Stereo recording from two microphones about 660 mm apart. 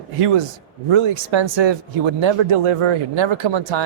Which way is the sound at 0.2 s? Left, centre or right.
Right.